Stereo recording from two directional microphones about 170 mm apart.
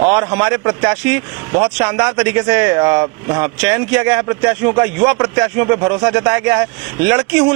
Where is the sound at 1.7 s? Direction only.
10° right (ahead or behind).